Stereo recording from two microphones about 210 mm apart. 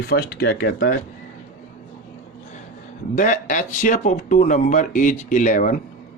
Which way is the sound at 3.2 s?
35° left (ahead or behind).